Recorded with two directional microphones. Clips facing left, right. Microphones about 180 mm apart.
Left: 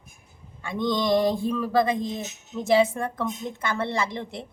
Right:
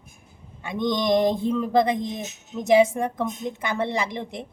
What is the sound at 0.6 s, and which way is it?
A woman's voice, 20° right (ahead or behind).